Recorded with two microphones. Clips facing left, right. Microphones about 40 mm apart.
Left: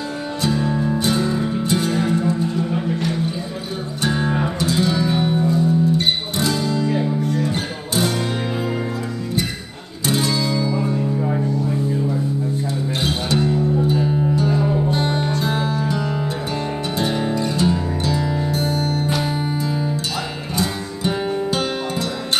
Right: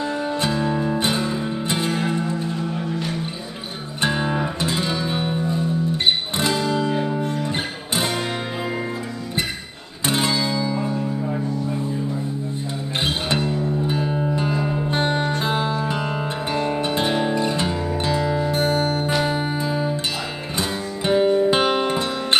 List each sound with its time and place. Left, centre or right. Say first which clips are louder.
0.4 s music: left 4 dB; right
0.9 s music: left 2 dB; right
4.0 s music: left 1 dB; right
10.0 s music: left 1 dB; right
10.5 s music: left 2 dB; centre
14.3 s music: left 4 dB; right
18.5 s music: right 1 dB; right
20.5 s guitar: left 2 dB; right
21.5 s music: right 4 dB; right